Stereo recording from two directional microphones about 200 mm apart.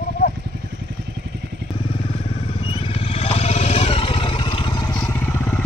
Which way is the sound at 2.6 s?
30° left (ahead or behind).